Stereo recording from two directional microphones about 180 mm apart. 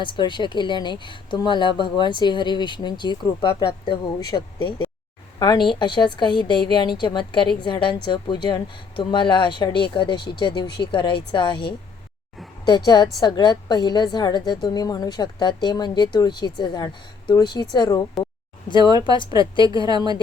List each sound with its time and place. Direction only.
0.0 s a woman's voice: 25° left (ahead or behind)